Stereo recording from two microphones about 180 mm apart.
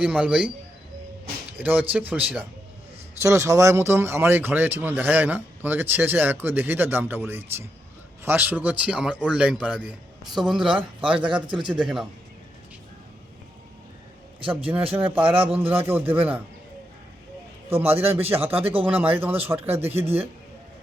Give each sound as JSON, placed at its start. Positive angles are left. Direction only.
{"t": 0.0, "sound": "speech", "side_deg": -5}
{"t": 1.5, "sound": "a man's voice", "side_deg": -10}
{"t": 11.4, "sound": "speech", "side_deg": -25}
{"t": 11.7, "sound": "a man's voice", "side_deg": -5}
{"t": 14.4, "sound": "speech", "side_deg": -10}
{"t": 18.3, "sound": "speech", "side_deg": -10}
{"t": 18.5, "sound": "speech", "side_deg": -30}
{"t": 19.1, "sound": "speech", "side_deg": -10}